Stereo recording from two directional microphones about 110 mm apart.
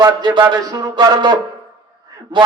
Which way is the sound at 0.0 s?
45° right (ahead or behind).